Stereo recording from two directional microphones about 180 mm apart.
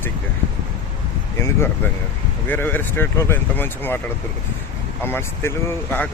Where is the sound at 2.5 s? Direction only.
10° left (ahead or behind).